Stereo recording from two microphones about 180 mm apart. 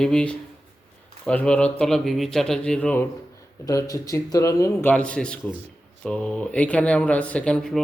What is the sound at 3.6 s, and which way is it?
Speech, 20° left (ahead or behind).